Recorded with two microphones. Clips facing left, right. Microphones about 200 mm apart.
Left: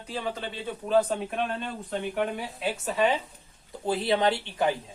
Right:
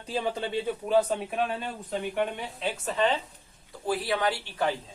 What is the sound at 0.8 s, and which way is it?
Speech, 5° right (ahead or behind).